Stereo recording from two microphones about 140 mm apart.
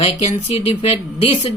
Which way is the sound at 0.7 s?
45° left (ahead or behind).